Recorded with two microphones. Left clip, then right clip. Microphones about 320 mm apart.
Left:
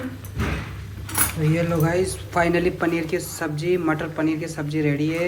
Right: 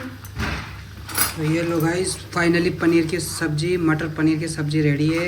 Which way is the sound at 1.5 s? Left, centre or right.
Centre.